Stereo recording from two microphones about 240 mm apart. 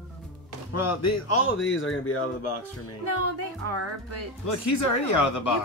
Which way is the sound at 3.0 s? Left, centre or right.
Right.